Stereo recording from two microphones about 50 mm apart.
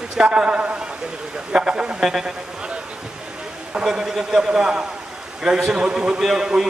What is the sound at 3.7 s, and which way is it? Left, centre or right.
A man's voice, centre.